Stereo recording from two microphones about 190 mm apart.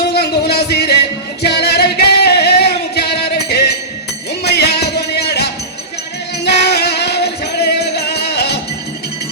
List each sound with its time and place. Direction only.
0.1 s a sound: 60° left (ahead or behind)
1.4 s singing: 60° left (ahead or behind)
4.5 s music: 60° left (ahead or behind)